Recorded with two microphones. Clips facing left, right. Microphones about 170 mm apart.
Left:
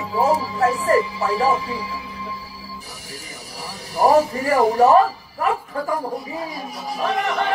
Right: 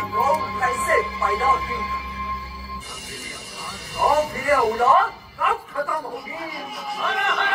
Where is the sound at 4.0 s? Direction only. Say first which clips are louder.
Left 5 dB; 40° left (ahead or behind).